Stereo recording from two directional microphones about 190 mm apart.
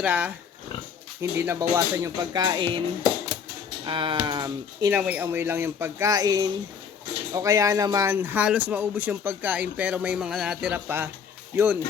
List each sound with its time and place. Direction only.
0.0 s a man's voice: 5° right (ahead or behind); by 2.8 s 25° right (ahead or behind)
3.8 s speech: 25° right (ahead or behind)
4.9 s a man's voice: 5° right (ahead or behind)